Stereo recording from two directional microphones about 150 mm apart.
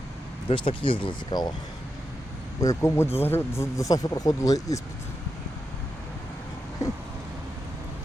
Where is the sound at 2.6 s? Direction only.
20° left (ahead or behind).